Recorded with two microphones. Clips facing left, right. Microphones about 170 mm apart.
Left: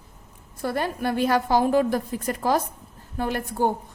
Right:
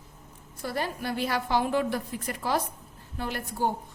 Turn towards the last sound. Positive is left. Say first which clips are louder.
# left 6 dB
turn(degrees=50)  # may be behind; listen again after turning